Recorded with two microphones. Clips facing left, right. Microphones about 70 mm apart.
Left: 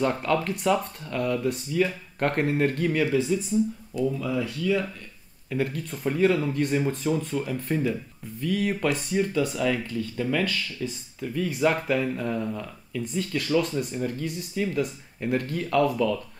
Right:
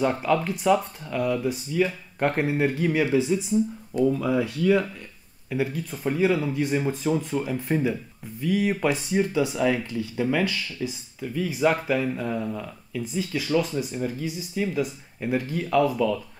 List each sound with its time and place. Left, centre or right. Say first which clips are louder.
0.0 s speech: right 1 dB; centre
4.2 s speech: right 4 dB; right
5.5 s speech: right 1 dB; centre